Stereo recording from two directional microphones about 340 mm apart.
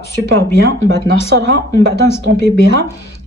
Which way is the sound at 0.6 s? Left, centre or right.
Right.